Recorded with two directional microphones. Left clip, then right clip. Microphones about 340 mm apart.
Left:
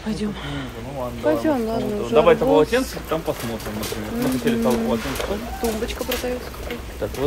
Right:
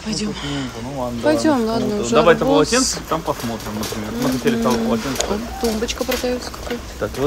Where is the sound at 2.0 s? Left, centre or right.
Right.